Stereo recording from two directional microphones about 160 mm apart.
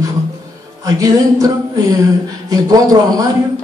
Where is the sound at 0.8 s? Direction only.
20° right (ahead or behind).